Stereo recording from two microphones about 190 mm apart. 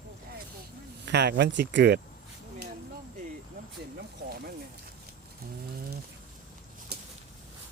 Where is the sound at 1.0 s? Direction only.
60° right (ahead or behind).